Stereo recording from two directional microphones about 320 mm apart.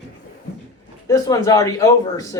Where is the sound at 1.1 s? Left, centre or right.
Centre.